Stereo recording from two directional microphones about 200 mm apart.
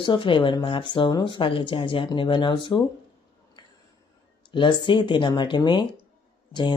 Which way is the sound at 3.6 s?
20° left (ahead or behind).